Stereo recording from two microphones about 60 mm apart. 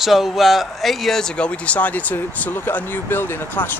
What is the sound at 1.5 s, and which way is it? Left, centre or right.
Speech, left.